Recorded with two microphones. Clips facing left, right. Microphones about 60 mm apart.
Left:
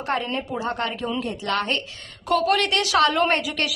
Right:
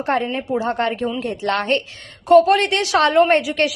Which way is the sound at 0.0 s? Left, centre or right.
Right.